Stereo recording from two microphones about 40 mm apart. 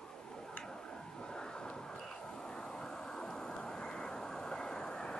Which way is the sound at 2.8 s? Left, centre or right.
Centre.